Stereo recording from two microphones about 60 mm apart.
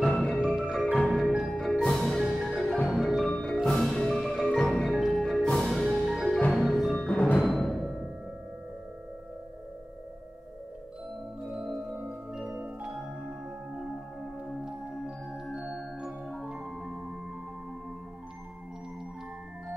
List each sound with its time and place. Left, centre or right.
0.0 s music: centre
0.4 s music: centre
3.3 s music: centre
5.1 s music: centre
7.1 s music: left
7.5 s music: centre
11.4 s music: centre
12.3 s marimba: centre
14.5 s music: centre